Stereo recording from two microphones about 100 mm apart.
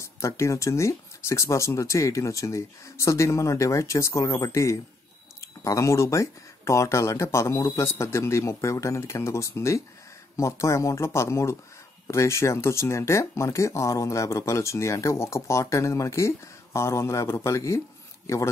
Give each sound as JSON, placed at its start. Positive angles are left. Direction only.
{"t": 0.0, "sound": "speech", "side_deg": 30}